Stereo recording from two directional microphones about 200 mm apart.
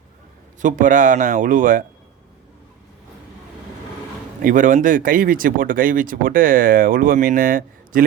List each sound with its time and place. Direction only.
0.6 s speech: 40° right (ahead or behind)
4.4 s speech: 40° right (ahead or behind)